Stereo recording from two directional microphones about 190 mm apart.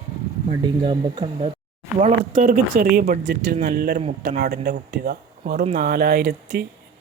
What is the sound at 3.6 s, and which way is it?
A man's voice, 55° right (ahead or behind).